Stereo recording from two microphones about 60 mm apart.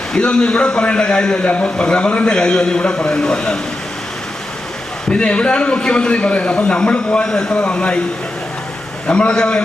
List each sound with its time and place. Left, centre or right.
0.2 s a man's voice: centre
5.0 s a man's voice: centre
9.0 s a man's voice: centre